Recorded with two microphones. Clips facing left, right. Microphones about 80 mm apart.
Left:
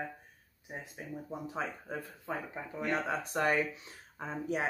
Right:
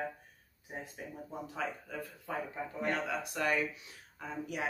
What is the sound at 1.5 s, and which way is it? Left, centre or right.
A woman's voice, left.